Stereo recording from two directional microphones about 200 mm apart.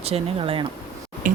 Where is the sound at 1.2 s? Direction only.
40° right (ahead or behind).